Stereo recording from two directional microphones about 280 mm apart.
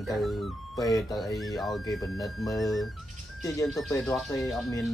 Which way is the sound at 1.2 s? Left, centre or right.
Centre.